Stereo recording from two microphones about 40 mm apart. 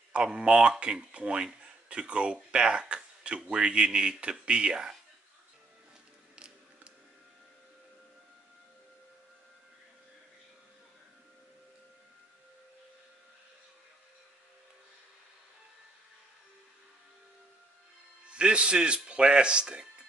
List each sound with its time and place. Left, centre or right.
0.1 s speech: right
6.3 s music: right
18.3 s a man's voice: right